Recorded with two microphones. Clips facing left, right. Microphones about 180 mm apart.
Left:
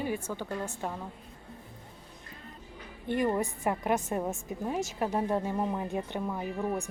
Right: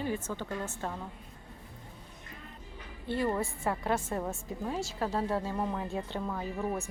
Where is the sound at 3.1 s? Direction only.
15° left (ahead or behind).